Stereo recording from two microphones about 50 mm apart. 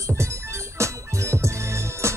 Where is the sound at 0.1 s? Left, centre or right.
Right.